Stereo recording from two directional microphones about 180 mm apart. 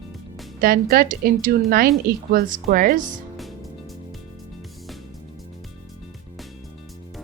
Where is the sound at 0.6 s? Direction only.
55° right (ahead or behind).